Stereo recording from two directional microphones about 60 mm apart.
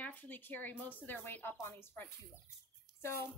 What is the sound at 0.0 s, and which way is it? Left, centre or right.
A child's voice, left.